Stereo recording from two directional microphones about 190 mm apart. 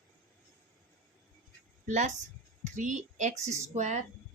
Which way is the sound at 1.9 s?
40° right (ahead or behind).